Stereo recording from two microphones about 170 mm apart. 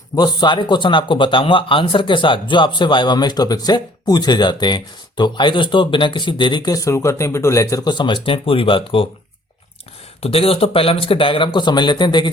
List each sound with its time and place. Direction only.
0.2 s speech: 25° left (ahead or behind)
10.2 s speech: 35° left (ahead or behind)